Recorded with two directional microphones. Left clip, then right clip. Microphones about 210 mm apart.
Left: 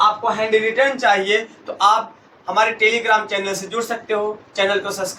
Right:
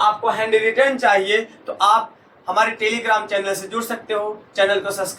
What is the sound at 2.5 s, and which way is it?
A man's voice, centre (ahead or behind).